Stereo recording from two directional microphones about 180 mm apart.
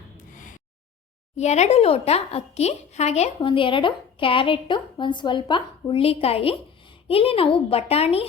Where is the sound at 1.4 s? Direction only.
40° left (ahead or behind).